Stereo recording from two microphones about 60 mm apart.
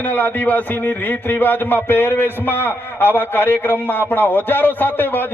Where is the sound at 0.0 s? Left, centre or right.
Left.